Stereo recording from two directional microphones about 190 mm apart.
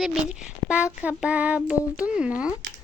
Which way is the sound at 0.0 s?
Centre (ahead or behind).